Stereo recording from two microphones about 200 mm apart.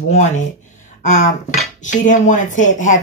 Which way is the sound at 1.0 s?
35° left (ahead or behind).